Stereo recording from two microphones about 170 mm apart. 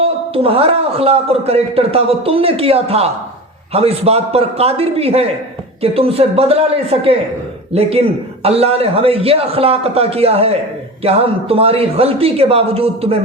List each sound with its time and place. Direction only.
0.0 s a man's voice: 35° right (ahead or behind)